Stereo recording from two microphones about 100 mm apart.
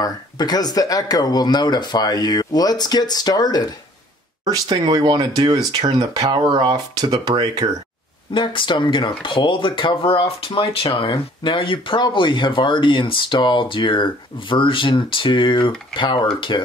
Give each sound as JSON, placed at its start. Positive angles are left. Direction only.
{"t": 0.0, "sound": "speech", "side_deg": 40}
{"t": 4.5, "sound": "speech", "side_deg": -45}
{"t": 8.3, "sound": "speech", "side_deg": 55}